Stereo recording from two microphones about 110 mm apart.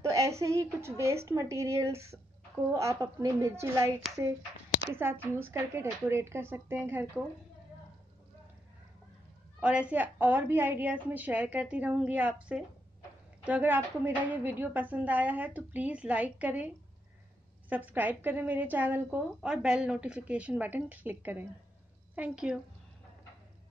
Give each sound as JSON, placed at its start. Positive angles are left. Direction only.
{"t": 0.0, "sound": "a woman's voice", "side_deg": -30}
{"t": 4.9, "sound": "a woman's voice", "side_deg": -20}
{"t": 9.6, "sound": "a woman's voice", "side_deg": -10}